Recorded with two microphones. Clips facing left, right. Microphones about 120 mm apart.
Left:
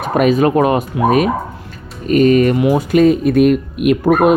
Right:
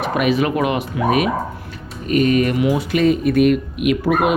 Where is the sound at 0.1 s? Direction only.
45° left (ahead or behind).